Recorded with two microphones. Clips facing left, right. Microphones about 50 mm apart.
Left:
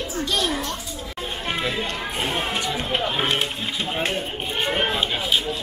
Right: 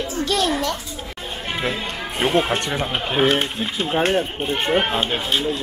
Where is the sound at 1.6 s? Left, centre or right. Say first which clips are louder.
Right 3 dB; right.